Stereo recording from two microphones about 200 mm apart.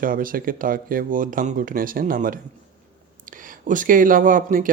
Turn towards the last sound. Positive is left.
turn(degrees=-45)  # may be behind; listen again after turning